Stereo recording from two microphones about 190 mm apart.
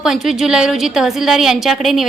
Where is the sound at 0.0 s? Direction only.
Centre (ahead or behind).